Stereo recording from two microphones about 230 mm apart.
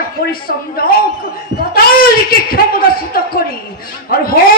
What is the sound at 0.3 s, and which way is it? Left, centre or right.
Speech, left.